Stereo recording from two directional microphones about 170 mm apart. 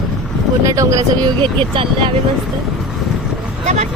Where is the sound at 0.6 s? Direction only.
20° right (ahead or behind).